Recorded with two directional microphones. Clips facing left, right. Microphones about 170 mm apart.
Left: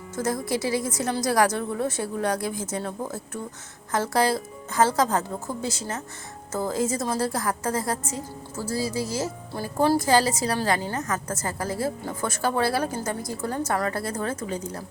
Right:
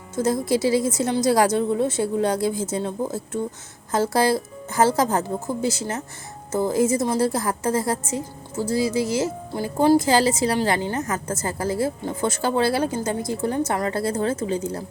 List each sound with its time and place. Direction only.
0.2 s a woman's voice: 25° right (ahead or behind)